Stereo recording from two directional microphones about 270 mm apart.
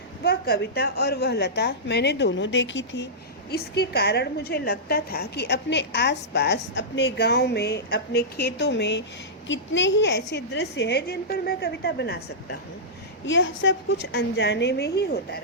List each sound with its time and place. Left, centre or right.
0.2 s a woman's voice: left